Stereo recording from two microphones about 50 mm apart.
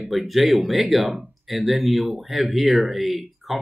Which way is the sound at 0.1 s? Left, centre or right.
Centre.